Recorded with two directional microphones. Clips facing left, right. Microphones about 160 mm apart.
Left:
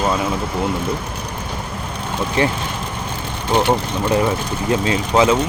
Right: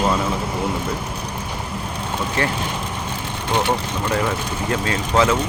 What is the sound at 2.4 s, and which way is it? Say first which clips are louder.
Speech: left 5 dB; 20° left (ahead or behind).